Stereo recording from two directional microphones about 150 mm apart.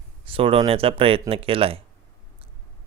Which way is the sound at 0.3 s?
40° right (ahead or behind).